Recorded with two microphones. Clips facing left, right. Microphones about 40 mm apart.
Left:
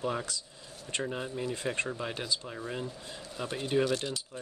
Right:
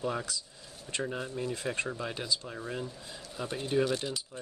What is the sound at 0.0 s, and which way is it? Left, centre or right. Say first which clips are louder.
Speech: even; centre.